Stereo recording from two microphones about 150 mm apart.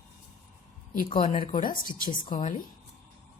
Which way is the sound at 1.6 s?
65° left (ahead or behind).